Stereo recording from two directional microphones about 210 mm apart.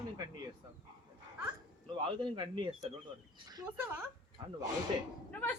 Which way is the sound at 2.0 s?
25° right (ahead or behind).